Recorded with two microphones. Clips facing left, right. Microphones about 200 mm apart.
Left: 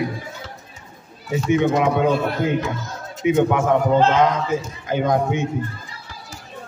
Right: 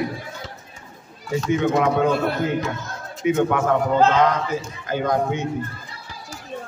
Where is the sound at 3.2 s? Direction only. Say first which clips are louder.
Left 2 dB; 15° left (ahead or behind).